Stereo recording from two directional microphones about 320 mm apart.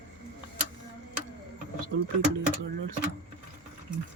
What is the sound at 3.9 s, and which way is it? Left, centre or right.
Sewing machine, right.